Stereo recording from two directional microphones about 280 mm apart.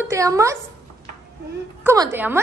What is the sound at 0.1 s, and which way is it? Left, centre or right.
Speech, centre.